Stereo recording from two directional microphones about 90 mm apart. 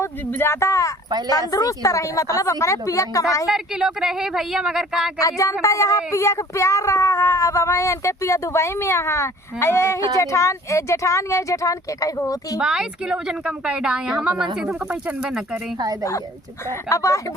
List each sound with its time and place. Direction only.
0.0 s speech: 25° left (ahead or behind)
3.5 s speech: 5° right (ahead or behind)
5.2 s speech: 35° left (ahead or behind)
12.5 s speech: 5° right (ahead or behind)
16.9 s speech: 35° left (ahead or behind)